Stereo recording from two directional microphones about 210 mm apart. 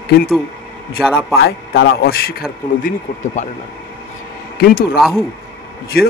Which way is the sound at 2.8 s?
35° left (ahead or behind).